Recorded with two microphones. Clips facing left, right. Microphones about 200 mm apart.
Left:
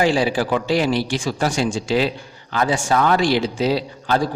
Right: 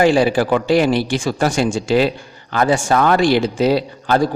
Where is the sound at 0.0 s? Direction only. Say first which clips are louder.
Right 5 dB; 55° right (ahead or behind).